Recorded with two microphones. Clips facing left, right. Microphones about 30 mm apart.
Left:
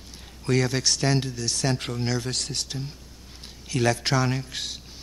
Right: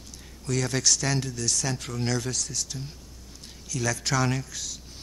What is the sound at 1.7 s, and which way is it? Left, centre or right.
Speech, left.